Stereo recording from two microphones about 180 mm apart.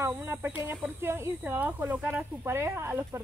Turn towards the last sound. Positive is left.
turn(degrees=-15)  # may be behind; listen again after turning